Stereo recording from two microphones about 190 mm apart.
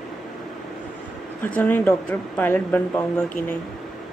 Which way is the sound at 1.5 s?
10° left (ahead or behind).